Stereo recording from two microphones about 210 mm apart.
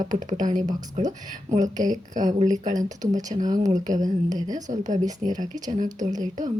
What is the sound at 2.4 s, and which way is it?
Speech, 35° right (ahead or behind).